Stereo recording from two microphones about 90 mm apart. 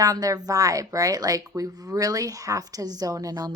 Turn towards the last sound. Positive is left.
turn(degrees=-45)  # may be behind; listen again after turning